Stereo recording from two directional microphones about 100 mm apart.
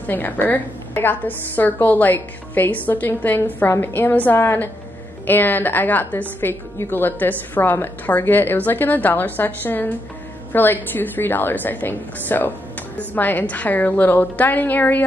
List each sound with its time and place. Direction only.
0.0 s a woman's voice: 20° left (ahead or behind)